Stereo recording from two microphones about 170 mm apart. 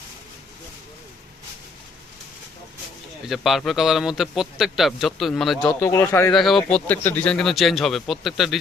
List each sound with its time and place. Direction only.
3.2 s a man's voice: centre (ahead or behind)
5.8 s speech: 15° left (ahead or behind)
6.3 s a man's voice: centre (ahead or behind)